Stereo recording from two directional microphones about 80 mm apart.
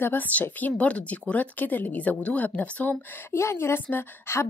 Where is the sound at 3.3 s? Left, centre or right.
Left.